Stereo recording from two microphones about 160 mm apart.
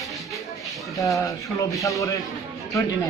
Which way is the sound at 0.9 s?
20° left (ahead or behind).